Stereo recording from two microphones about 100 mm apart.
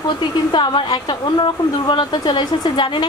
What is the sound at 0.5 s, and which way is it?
A woman's voice, 50° left (ahead or behind).